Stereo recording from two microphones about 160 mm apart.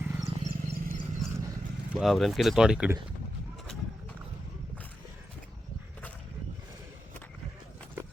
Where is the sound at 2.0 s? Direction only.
Centre (ahead or behind).